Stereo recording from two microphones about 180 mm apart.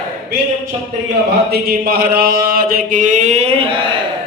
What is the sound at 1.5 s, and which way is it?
Mantra, 60° right (ahead or behind).